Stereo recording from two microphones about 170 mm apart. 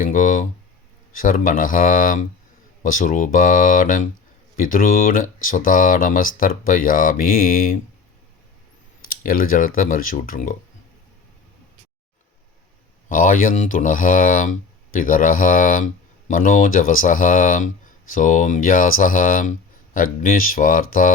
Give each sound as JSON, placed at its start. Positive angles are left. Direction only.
{"t": 0.0, "sound": "a sound", "side_deg": 50}
{"t": 1.1, "sound": "speech", "side_deg": 55}
{"t": 9.0, "sound": "speech", "side_deg": 55}
{"t": 13.1, "sound": "speech", "side_deg": 50}